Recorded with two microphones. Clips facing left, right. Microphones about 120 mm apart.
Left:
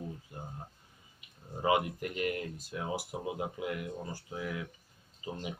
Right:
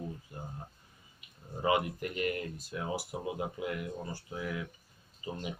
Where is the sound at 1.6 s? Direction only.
10° left (ahead or behind).